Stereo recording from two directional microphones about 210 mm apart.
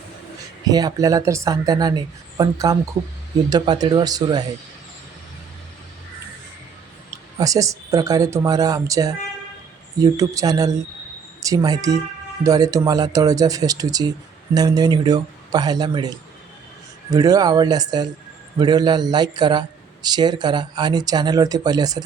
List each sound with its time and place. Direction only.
0.6 s a man's voice: 20° right (ahead or behind)
7.3 s a man's voice: 15° right (ahead or behind)